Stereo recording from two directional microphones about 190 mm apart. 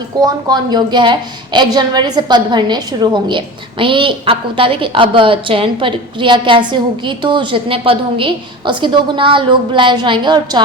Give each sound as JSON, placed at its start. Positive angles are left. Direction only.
{"t": 0.4, "sound": "a woman's voice", "side_deg": -20}